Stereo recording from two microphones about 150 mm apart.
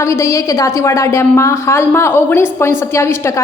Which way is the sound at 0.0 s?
20° left (ahead or behind).